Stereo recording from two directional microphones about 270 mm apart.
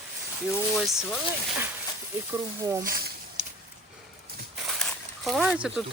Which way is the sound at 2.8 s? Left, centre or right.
Right.